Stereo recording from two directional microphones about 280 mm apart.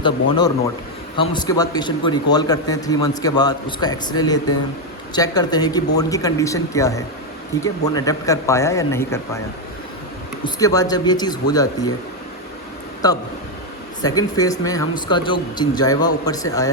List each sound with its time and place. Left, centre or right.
0.0 s speech: centre
10.4 s speech: centre
14.0 s speech: centre